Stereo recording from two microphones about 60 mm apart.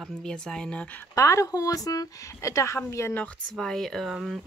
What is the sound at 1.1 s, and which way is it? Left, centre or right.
Speech, left.